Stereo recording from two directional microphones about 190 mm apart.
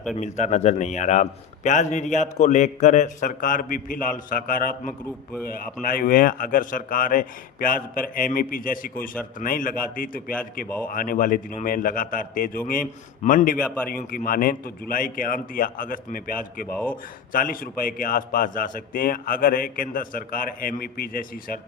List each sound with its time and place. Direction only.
0.2 s a man's voice: 40° left (ahead or behind)
5.9 s a man's voice: 50° left (ahead or behind)
13.6 s a man's voice: 5° left (ahead or behind)
13.8 s a man's voice: 50° left (ahead or behind)
16.6 s a man's voice: 10° left (ahead or behind)
17.3 s a man's voice: 50° left (ahead or behind)